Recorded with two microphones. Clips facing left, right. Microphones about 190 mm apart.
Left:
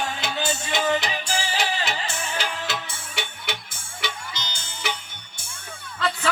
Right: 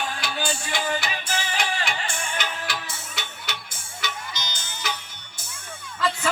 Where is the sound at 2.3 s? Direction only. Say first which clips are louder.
Left 2 dB; 30° left (ahead or behind).